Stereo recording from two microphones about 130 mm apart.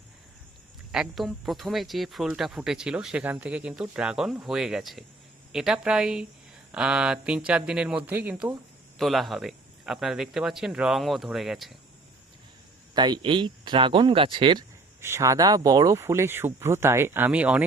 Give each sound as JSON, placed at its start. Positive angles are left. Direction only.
{"t": 0.9, "sound": "speech", "side_deg": -5}
{"t": 9.0, "sound": "speech", "side_deg": 0}
{"t": 12.9, "sound": "speech", "side_deg": -35}
{"t": 15.0, "sound": "speech", "side_deg": -20}